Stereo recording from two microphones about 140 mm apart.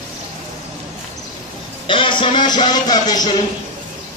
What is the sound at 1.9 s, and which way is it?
Music, 35° left (ahead or behind).